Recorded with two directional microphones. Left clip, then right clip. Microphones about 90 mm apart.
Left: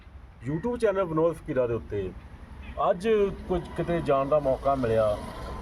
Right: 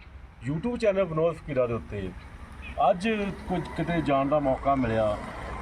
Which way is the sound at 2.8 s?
55° left (ahead or behind).